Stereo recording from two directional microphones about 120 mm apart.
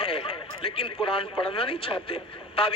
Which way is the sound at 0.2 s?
50° left (ahead or behind).